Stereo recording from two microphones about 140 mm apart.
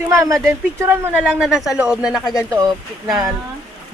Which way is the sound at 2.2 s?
25° left (ahead or behind).